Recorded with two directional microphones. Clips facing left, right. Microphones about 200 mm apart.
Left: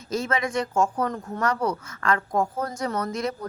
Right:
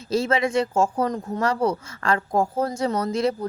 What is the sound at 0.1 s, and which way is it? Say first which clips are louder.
Speech: right 5 dB; 30° right (ahead or behind).